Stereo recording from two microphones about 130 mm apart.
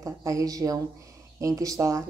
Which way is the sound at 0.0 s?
25° right (ahead or behind).